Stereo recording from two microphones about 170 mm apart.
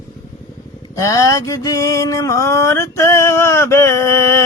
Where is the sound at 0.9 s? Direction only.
20° left (ahead or behind).